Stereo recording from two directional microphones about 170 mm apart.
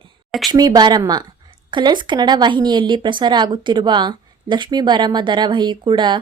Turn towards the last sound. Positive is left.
turn(degrees=-25)  # may be behind; listen again after turning